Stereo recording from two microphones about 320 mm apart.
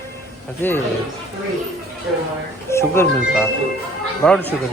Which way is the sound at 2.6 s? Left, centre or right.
Centre.